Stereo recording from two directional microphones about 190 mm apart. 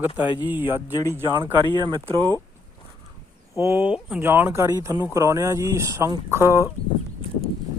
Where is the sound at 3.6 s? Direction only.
10° right (ahead or behind).